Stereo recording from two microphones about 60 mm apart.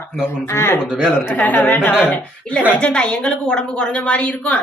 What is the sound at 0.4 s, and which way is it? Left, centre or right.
Speech, left.